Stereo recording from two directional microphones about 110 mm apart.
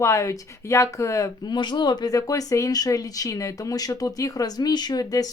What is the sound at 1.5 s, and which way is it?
Speech, 40° left (ahead or behind).